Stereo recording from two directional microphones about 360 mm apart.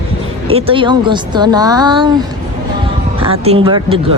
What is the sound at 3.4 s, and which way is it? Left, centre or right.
Speech, centre.